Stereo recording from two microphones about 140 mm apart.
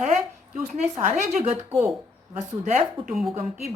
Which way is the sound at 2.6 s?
55° right (ahead or behind).